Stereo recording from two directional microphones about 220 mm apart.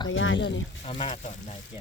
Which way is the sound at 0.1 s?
60° left (ahead or behind).